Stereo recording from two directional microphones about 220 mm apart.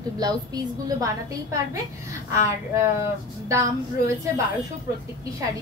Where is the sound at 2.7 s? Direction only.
10° right (ahead or behind).